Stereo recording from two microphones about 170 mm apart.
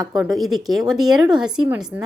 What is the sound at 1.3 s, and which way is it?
Speech, 25° right (ahead or behind).